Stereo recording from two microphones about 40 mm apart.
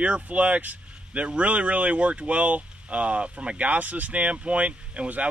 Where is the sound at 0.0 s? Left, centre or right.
Right.